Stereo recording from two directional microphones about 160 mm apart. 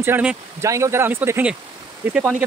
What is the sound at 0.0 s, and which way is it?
Speech, 10° right (ahead or behind).